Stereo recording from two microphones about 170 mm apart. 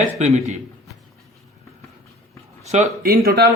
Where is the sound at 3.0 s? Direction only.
60° right (ahead or behind).